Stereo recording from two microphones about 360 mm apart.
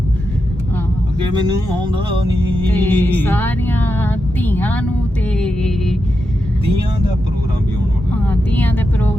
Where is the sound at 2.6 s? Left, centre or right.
Centre.